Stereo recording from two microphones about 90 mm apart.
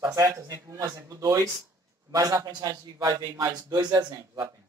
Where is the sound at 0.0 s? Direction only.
40° right (ahead or behind).